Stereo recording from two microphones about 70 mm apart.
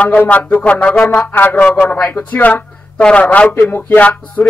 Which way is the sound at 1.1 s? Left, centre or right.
Left.